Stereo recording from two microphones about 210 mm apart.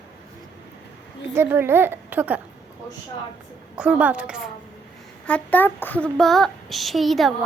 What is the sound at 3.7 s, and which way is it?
Speech, 5° right (ahead or behind).